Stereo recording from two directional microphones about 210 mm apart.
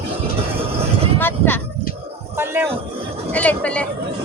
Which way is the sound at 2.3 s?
10° right (ahead or behind).